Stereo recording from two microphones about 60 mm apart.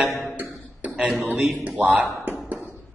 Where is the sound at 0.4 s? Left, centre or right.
Right.